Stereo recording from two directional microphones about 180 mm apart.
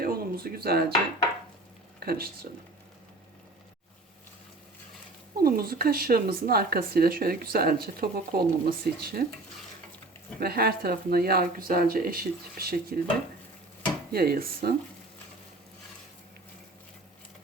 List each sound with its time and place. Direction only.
0.0 s a sound: 55° right (ahead or behind)
2.0 s speech: 55° right (ahead or behind)
5.4 s speech: 55° right (ahead or behind)
10.4 s speech: 60° right (ahead or behind)
14.1 s speech: 60° right (ahead or behind)